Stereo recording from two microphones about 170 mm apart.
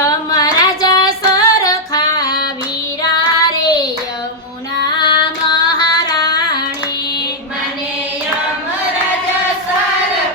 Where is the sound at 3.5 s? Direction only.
25° left (ahead or behind).